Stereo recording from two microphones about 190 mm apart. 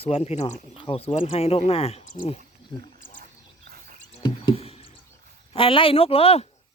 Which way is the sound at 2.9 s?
45° left (ahead or behind).